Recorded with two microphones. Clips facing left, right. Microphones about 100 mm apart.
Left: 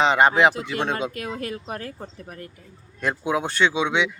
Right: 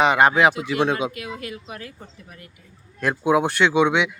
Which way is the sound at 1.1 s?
40° left (ahead or behind).